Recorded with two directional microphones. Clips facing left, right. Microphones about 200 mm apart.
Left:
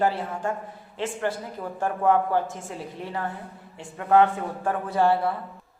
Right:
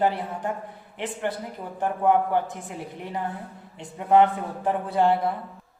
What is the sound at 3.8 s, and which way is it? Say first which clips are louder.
A man's voice: right 1 dB; 20° right (ahead or behind).